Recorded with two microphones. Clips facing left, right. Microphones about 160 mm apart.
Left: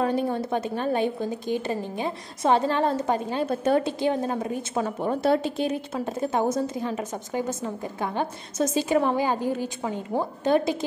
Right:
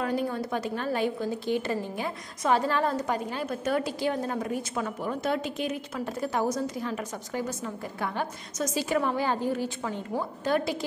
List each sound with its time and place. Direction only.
0.0 s a woman's voice: 25° left (ahead or behind)